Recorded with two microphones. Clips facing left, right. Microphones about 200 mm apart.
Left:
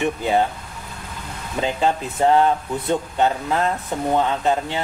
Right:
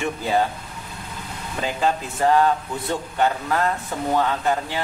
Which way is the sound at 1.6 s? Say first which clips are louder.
Left 2 dB; 20° left (ahead or behind).